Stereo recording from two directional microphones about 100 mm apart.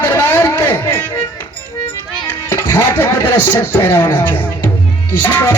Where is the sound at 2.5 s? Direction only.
25° left (ahead or behind).